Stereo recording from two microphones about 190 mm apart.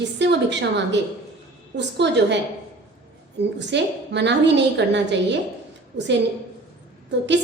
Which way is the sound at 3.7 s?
65° right (ahead or behind).